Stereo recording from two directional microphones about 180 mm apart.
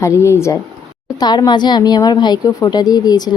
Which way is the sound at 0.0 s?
15° left (ahead or behind).